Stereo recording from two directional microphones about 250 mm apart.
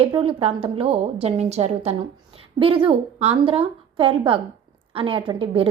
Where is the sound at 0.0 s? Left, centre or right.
Right.